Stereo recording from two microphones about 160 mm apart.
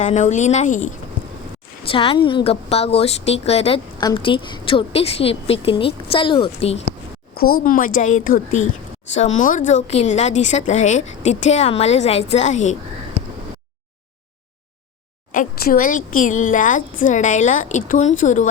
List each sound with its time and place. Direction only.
0.0 s a woman's voice: 50° left (ahead or behind)
1.9 s a woman's voice: 35° left (ahead or behind)
4.0 s a woman's voice: 30° left (ahead or behind)
7.3 s a woman's voice: 60° left (ahead or behind)
15.3 s a woman's voice: 60° left (ahead or behind)